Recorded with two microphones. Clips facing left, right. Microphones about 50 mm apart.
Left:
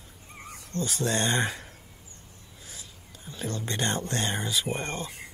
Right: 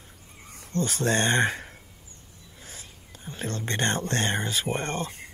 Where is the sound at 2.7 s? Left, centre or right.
Right.